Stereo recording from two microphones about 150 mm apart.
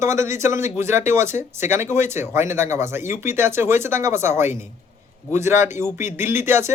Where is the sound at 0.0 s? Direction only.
20° right (ahead or behind).